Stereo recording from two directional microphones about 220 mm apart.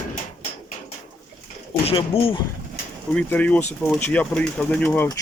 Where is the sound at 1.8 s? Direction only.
25° left (ahead or behind).